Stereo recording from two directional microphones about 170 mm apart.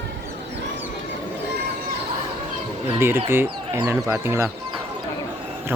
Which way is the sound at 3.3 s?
15° right (ahead or behind).